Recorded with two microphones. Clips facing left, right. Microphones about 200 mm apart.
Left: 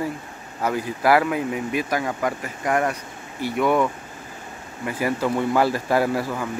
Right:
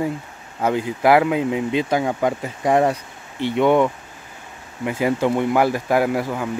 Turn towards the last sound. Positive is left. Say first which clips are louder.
# right 2 dB
turn(degrees=-15)  # may be behind; listen again after turning